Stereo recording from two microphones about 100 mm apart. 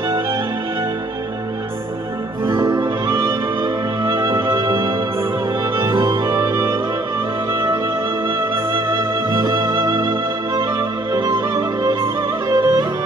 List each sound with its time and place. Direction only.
2.6 s music: 45° right (ahead or behind)
5.8 s music: 30° right (ahead or behind)
8.7 s music: 50° right (ahead or behind)